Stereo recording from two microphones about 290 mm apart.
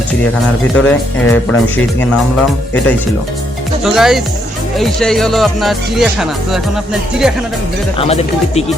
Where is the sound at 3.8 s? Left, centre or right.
Centre.